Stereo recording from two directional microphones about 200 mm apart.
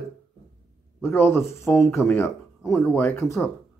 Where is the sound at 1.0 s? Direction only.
10° left (ahead or behind).